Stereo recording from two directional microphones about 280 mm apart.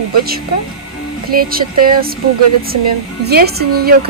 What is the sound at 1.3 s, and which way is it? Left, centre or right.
Speech, right.